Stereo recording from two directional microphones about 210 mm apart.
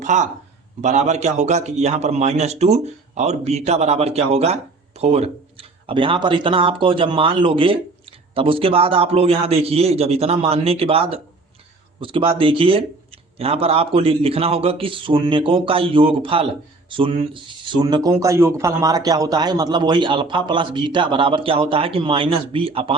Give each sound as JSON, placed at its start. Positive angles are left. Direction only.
{"t": 0.0, "sound": "a man's voice", "side_deg": -35}